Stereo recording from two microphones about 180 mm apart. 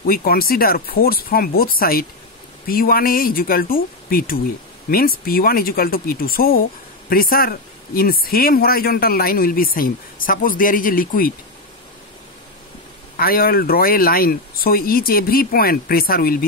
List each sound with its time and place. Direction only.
0.0 s speech: 55° left (ahead or behind)
13.2 s speech: 55° left (ahead or behind)